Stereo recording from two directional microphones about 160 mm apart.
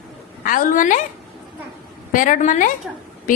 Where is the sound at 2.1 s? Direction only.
55° left (ahead or behind).